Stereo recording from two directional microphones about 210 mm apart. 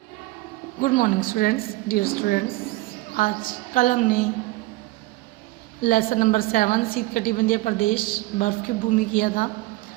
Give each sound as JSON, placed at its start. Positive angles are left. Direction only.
{"t": 0.8, "sound": "a woman's voice", "side_deg": 40}
{"t": 5.8, "sound": "a woman's voice", "side_deg": 45}